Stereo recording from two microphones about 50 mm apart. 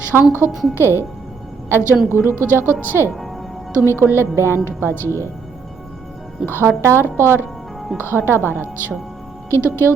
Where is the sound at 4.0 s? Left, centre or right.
Right.